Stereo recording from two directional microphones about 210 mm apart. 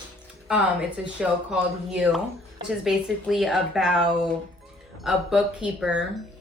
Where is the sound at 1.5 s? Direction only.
5° right (ahead or behind).